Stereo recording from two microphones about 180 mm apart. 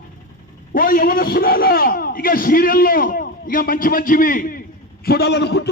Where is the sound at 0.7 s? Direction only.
50° left (ahead or behind).